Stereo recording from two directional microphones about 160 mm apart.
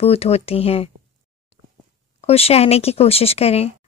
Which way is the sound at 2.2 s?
40° left (ahead or behind).